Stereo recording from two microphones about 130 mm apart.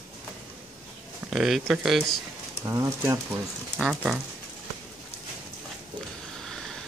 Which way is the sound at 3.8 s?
5° right (ahead or behind).